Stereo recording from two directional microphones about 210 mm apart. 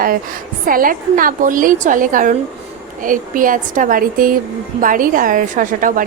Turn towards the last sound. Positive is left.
turn(degrees=-40)  # may be behind; listen again after turning